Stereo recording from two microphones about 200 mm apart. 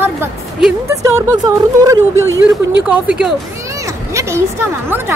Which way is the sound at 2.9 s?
5° right (ahead or behind).